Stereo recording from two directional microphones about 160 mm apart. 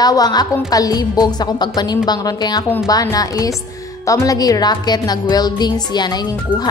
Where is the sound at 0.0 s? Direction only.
25° left (ahead or behind).